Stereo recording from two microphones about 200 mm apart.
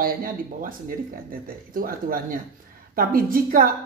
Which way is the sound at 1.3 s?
45° right (ahead or behind).